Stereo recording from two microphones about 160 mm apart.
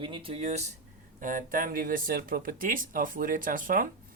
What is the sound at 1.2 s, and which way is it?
Speech, 55° right (ahead or behind).